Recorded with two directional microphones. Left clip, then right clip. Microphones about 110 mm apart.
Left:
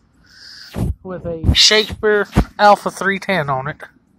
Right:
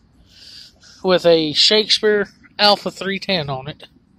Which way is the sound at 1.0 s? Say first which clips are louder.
Right 16 dB; 50° right (ahead or behind).